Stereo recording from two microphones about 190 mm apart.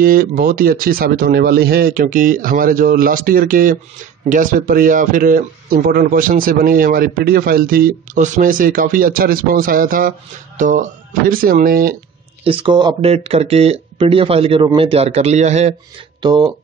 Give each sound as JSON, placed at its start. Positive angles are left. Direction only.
{"t": 0.0, "sound": "speech", "side_deg": -50}
{"t": 12.4, "sound": "speech", "side_deg": -25}
{"t": 16.2, "sound": "speech", "side_deg": -25}